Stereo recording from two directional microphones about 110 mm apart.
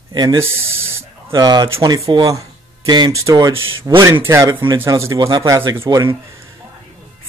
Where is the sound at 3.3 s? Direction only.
35° right (ahead or behind).